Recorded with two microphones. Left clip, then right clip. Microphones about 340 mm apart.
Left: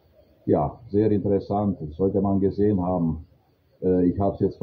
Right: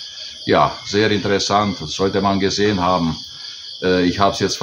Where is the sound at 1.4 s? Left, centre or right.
Right.